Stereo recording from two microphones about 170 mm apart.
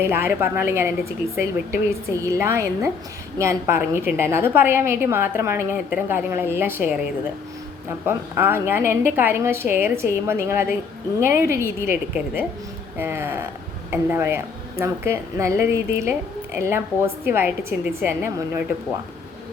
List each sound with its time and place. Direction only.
0.0 s a woman's voice: 15° right (ahead or behind)
2.2 s a woman's voice: 15° right (ahead or behind)
8.0 s a woman's voice: 15° right (ahead or behind)